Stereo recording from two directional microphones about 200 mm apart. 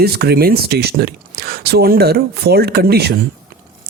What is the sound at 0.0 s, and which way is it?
Speech, 50° right (ahead or behind).